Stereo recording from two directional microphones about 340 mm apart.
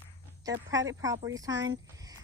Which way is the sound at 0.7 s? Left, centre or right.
Centre.